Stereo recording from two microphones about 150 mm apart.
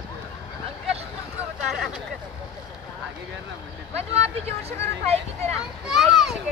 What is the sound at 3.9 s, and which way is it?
Vehicle, 45° right (ahead or behind).